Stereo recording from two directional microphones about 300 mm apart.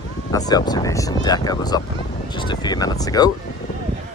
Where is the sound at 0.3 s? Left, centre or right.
Centre.